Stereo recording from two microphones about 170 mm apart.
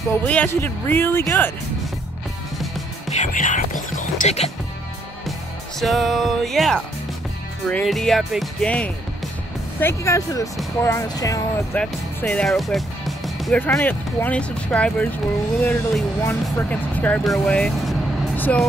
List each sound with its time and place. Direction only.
0.3 s speech: 10° left (ahead or behind)
3.1 s speech: 45° left (ahead or behind)
5.8 s speech: centre (ahead or behind); by 11.8 s 20° left (ahead or behind)
11.8 s speech: 5° left (ahead or behind)